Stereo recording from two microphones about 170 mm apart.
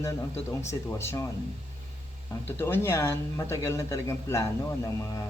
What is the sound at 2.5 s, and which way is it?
Speech, 15° left (ahead or behind).